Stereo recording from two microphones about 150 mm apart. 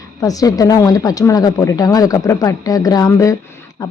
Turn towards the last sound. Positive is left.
turn(degrees=20)  # may be behind; listen again after turning